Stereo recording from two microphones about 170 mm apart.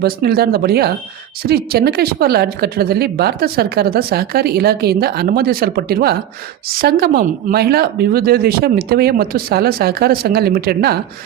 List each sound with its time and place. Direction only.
0.0 s speech: 65° right (ahead or behind)